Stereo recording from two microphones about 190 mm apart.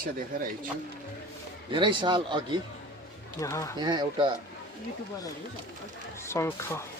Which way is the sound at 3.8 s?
25° right (ahead or behind).